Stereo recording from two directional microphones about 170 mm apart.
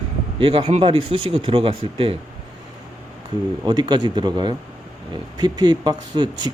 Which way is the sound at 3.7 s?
25° right (ahead or behind).